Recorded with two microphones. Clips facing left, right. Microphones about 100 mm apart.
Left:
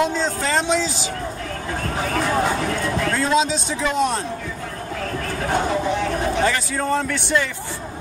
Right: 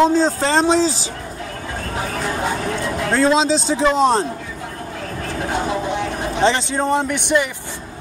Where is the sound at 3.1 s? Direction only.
35° right (ahead or behind).